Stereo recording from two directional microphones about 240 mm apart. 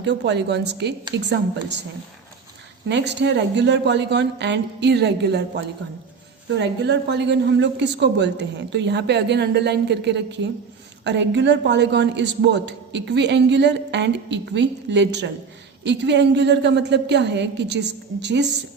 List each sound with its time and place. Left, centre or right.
0.0 s a woman's voice: right
2.9 s a woman's voice: right
6.5 s a woman's voice: right